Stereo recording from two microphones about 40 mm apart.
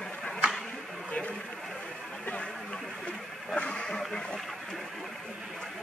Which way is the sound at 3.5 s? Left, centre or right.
Left.